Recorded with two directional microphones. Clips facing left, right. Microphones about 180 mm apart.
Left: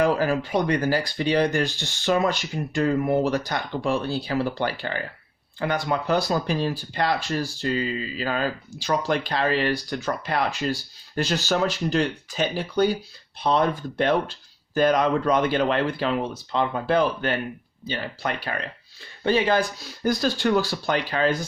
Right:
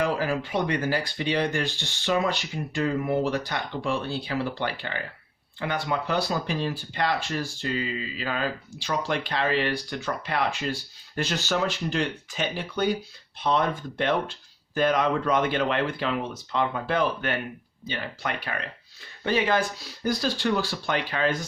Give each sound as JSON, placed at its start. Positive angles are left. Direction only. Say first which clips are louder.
{"t": 0.0, "sound": "speech", "louder": "left 4 dB", "side_deg": 45}
{"t": 20.0, "sound": "speech", "louder": "left 3 dB", "side_deg": 45}